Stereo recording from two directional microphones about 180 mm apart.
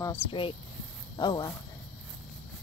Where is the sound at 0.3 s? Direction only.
30° left (ahead or behind).